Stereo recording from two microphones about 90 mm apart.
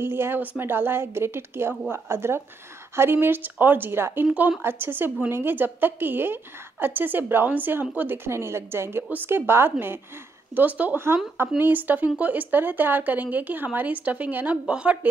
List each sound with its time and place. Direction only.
0.0 s a woman's voice: 25° right (ahead or behind)